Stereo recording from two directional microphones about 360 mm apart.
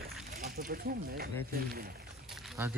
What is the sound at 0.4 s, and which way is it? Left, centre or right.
Speech, right.